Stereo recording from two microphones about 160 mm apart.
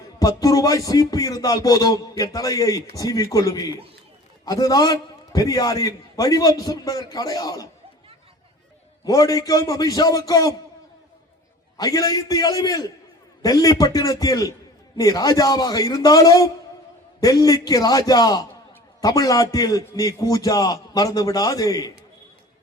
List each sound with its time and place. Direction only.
0.2 s a man's voice: 25° left (ahead or behind)
9.0 s a man's voice: 20° left (ahead or behind)
11.8 s a man's voice: 20° left (ahead or behind)